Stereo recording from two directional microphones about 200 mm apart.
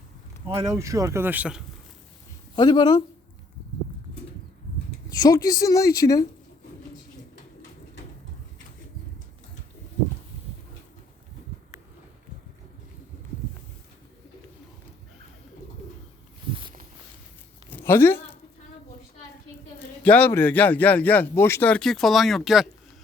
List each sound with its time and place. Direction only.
0.5 s speech: 15° right (ahead or behind)
2.6 s speech: 20° left (ahead or behind)
5.0 s speech: 20° left (ahead or behind)
17.7 s a sound: 10° left (ahead or behind)
20.0 s speech: 10° left (ahead or behind)